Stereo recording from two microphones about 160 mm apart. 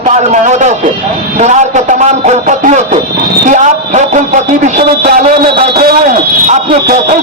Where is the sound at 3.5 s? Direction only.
50° right (ahead or behind).